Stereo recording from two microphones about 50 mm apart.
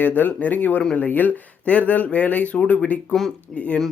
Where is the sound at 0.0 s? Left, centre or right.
Left.